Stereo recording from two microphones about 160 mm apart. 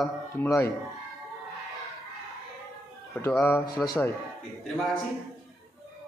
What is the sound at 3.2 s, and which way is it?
Speech, 15° left (ahead or behind).